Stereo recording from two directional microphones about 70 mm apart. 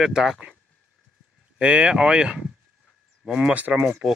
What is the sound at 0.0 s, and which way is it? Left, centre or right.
Speech, centre.